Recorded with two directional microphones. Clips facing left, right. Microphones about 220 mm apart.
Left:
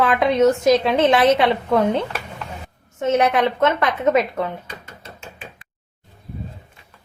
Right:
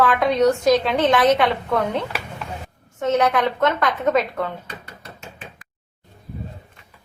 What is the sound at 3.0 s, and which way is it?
A woman's voice, 25° left (ahead or behind).